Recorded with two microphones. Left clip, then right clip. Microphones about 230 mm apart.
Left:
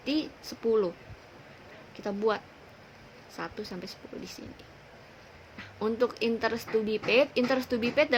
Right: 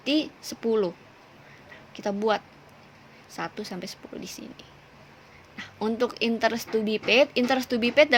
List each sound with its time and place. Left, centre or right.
0.0 s speech: right
2.0 s speech: right
5.5 s speech: right